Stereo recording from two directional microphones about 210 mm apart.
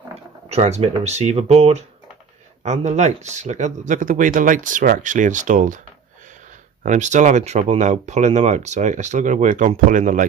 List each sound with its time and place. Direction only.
0.1 s speech: 30° right (ahead or behind)
6.8 s speech: 35° right (ahead or behind)